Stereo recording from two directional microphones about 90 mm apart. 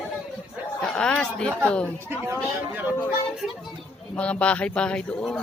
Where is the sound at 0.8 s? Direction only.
10° left (ahead or behind).